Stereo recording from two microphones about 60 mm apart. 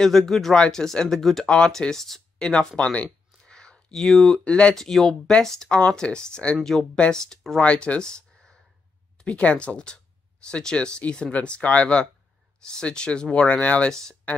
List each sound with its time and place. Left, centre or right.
0.0 s speech: centre
3.3 s a sound: centre
4.7 s speech: centre